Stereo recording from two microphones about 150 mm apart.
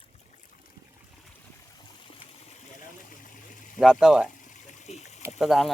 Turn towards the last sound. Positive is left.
turn(degrees=0)  # may be behind; listen again after turning